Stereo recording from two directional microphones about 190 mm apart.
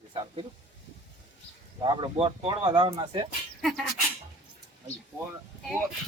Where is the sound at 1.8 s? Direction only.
25° right (ahead or behind).